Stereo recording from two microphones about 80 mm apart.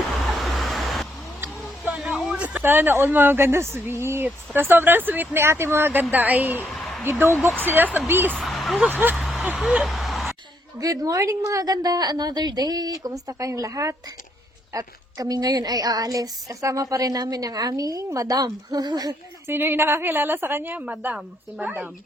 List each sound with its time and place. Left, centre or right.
0.3 s vehicle: centre
1.8 s a sound: centre
2.6 s speech: right
6.7 s a sound: centre
7.0 s speech: right
8.4 s speech: centre
8.9 s speech: right
9.2 s vehicle: centre
9.6 s a sound: centre
10.8 s a woman's voice: right
19.5 s speech: right
20.8 s a woman's voice: centre